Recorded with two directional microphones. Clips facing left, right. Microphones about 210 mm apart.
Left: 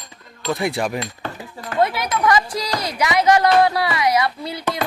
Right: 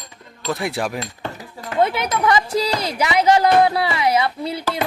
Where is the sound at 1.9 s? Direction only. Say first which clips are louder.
Even; 25° right (ahead or behind).